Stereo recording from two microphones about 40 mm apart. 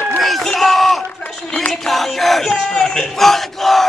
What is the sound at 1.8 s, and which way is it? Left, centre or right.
A man's voice, centre.